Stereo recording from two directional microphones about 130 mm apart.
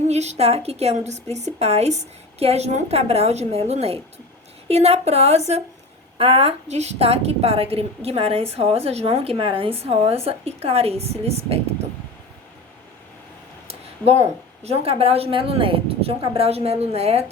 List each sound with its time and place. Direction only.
0.1 s a woman's voice: 60° right (ahead or behind)
13.7 s a woman's voice: 55° right (ahead or behind)